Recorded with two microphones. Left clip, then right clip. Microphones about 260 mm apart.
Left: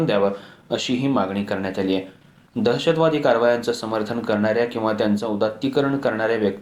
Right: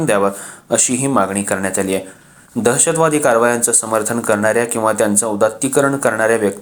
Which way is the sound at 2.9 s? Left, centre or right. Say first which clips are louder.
Right 2 dB; right.